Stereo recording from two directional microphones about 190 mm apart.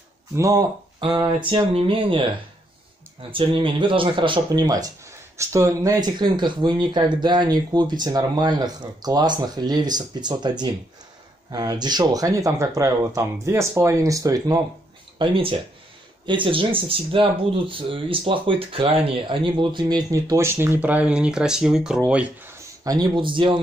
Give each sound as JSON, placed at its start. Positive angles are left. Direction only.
{"t": 0.4, "sound": "speech", "side_deg": -20}
{"t": 11.5, "sound": "speech", "side_deg": -20}
{"t": 22.8, "sound": "speech", "side_deg": -20}